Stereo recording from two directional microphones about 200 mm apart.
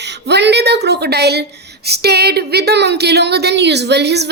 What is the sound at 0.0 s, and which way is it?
A woman's voice, 60° right (ahead or behind).